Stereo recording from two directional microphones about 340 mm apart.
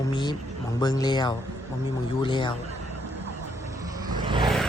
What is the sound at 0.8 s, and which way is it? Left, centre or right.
A man's voice, centre.